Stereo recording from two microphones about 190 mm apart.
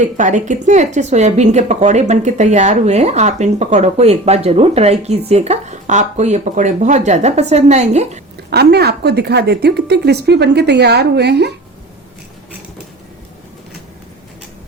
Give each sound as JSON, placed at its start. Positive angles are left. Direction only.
{"t": 0.2, "sound": "a woman's voice", "side_deg": -40}
{"t": 8.4, "sound": "a woman's voice", "side_deg": -60}